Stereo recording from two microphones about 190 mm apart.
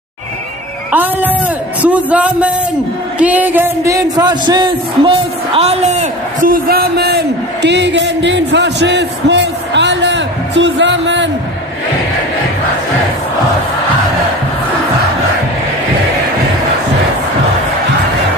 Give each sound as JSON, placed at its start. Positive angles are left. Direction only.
{"t": 0.9, "sound": "a man's voice", "side_deg": -10}